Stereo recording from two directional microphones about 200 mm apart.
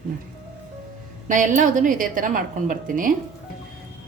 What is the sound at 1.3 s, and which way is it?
A woman's voice, 40° right (ahead or behind).